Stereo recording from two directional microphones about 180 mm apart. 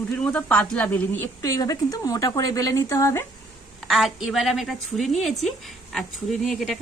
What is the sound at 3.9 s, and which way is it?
A woman's voice, centre (ahead or behind).